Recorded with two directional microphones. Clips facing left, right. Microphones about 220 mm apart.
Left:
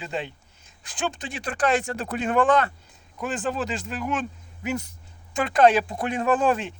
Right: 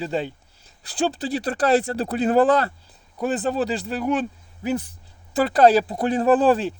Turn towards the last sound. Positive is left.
turn(degrees=-35)  # may be behind; listen again after turning